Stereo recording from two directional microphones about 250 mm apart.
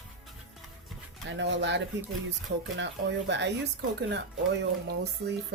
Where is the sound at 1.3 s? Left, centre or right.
Right.